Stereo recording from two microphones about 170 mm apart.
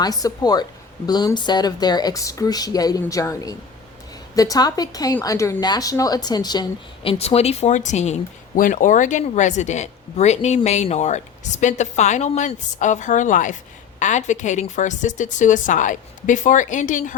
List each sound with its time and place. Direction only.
0.0 s a woman's voice: 20° left (ahead or behind); by 17.2 s 50° left (ahead or behind)